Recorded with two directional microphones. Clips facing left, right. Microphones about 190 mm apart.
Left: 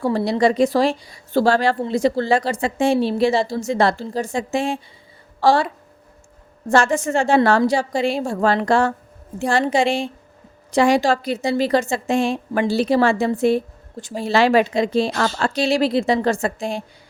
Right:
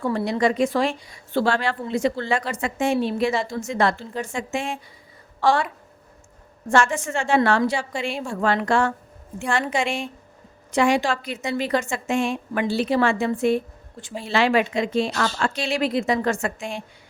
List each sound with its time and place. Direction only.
0.0 s speech: 35° left (ahead or behind)